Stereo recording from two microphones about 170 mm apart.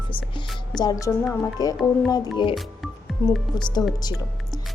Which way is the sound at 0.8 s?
20° left (ahead or behind).